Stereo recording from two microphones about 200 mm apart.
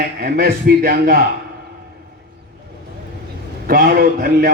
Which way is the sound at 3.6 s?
45° right (ahead or behind).